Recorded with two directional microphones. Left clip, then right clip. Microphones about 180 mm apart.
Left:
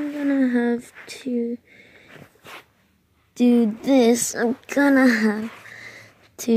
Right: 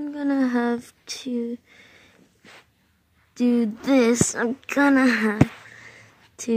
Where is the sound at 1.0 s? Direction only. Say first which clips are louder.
Right 1 dB; 50° left (ahead or behind).